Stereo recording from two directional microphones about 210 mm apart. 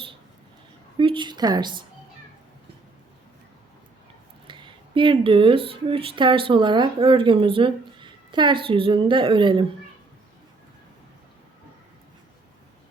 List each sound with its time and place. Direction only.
0.9 s a woman's voice: 25° right (ahead or behind)
4.4 s speech: 25° right (ahead or behind)